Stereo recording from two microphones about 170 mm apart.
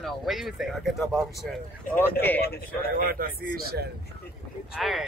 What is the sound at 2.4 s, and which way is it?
Speech, 70° left (ahead or behind).